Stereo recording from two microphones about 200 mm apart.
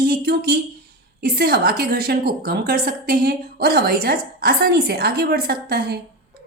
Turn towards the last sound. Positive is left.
turn(degrees=-50)  # may be behind; listen again after turning